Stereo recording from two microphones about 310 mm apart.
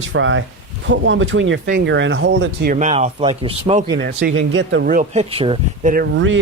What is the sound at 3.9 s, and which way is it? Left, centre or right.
Speech, right.